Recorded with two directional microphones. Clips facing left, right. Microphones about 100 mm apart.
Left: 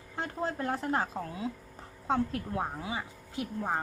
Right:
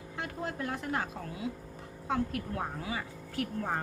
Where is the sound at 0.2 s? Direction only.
35° left (ahead or behind).